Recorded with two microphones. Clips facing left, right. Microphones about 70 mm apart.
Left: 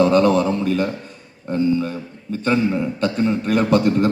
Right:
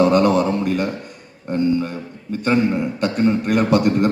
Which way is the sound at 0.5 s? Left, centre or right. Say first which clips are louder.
Even; right.